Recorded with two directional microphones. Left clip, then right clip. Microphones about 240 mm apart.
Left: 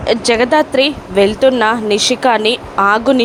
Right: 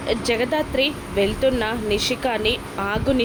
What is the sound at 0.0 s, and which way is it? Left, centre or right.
A woman's voice, centre.